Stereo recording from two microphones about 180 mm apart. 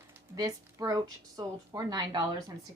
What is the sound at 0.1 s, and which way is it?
A woman's voice, 20° right (ahead or behind).